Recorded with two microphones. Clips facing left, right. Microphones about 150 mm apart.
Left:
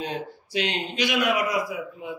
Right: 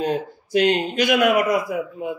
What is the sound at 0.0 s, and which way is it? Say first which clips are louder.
Speech: right 8 dB; 45° right (ahead or behind).